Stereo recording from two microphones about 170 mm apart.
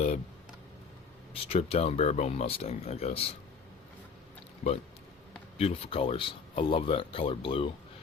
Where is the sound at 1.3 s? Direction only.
35° left (ahead or behind).